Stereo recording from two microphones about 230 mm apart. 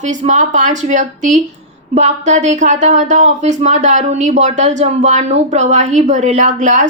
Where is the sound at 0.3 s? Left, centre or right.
Right.